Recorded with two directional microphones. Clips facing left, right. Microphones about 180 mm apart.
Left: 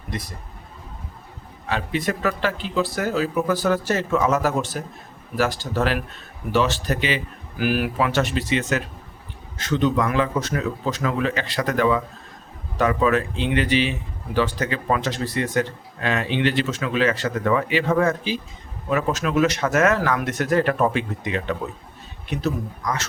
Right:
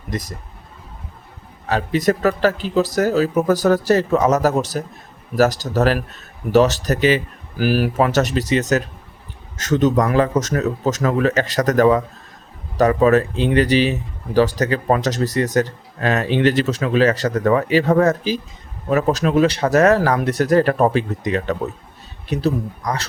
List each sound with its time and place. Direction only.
0.1 s a man's voice: 40° right (ahead or behind)
1.7 s a man's voice: 40° right (ahead or behind)